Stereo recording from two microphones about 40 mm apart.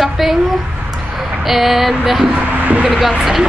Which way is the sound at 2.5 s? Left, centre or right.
Right.